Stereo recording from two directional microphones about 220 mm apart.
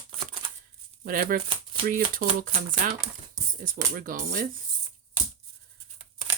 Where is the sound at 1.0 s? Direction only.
40° right (ahead or behind).